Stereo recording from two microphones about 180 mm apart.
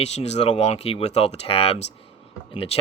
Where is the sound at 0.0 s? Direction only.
35° left (ahead or behind).